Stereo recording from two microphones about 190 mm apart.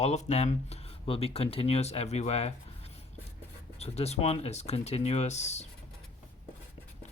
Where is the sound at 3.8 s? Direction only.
35° left (ahead or behind).